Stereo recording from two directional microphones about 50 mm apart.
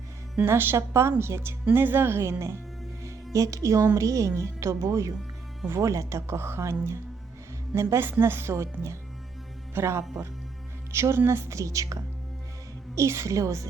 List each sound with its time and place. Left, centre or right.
0.4 s a woman's voice: right
1.7 s speech: right
3.3 s a woman's voice: right
8.2 s speech: right
9.7 s a woman's voice: right
13.0 s a woman's voice: right